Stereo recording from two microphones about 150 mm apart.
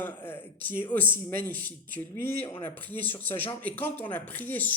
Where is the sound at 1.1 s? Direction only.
70° right (ahead or behind).